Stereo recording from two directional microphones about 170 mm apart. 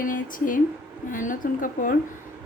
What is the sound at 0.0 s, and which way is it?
A woman's voice, 55° left (ahead or behind).